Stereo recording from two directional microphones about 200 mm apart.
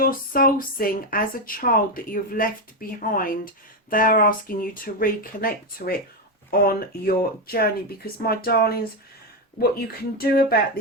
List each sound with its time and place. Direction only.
0.0 s speech: 45° left (ahead or behind)